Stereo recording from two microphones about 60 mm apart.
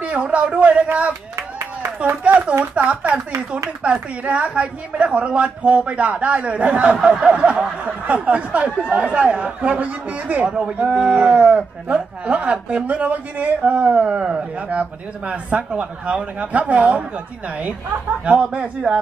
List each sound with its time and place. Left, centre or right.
0.0 s a woman's voice: right
1.3 s a sound: right
2.2 s a woman's voice: right
18.2 s speech: centre